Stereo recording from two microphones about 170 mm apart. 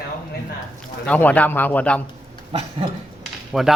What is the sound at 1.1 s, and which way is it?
Speech, 10° left (ahead or behind).